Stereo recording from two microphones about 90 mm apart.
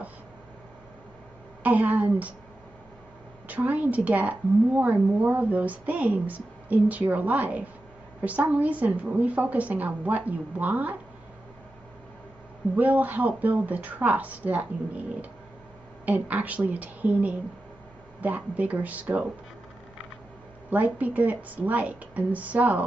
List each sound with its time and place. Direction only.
1.6 s a woman's voice: 20° right (ahead or behind)
3.4 s a woman's voice: 15° right (ahead or behind)
12.7 s a woman's voice: 20° right (ahead or behind)
16.1 s a woman's voice: 15° right (ahead or behind)
20.7 s a woman's voice: 15° right (ahead or behind)